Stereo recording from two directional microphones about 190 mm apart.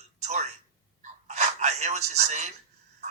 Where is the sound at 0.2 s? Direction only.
35° right (ahead or behind).